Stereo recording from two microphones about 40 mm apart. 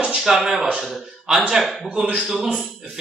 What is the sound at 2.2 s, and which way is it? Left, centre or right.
Speech, centre.